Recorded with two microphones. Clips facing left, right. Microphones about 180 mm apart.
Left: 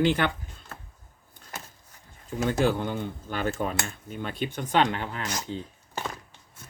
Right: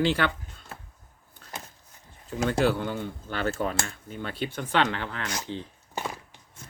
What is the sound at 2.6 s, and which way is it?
Speech, 15° left (ahead or behind).